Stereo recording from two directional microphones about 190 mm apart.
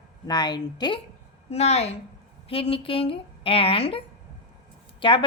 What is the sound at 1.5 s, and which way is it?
A woman's voice, 35° left (ahead or behind).